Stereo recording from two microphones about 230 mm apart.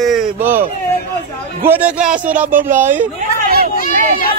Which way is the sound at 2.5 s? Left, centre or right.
Right.